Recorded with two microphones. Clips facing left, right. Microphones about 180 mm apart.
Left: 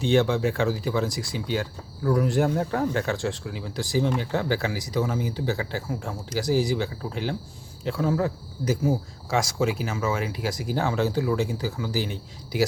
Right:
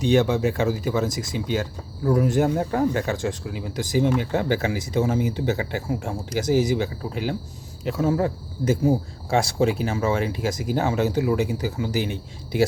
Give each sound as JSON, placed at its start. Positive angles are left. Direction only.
{"t": 0.0, "sound": "speech", "side_deg": -15}